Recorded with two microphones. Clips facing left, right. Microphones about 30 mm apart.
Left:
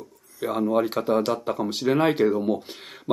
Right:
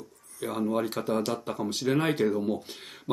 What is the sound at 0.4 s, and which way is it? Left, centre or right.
Speech, centre.